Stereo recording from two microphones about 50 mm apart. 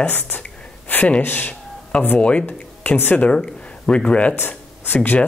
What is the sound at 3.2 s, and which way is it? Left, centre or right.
Speech, centre.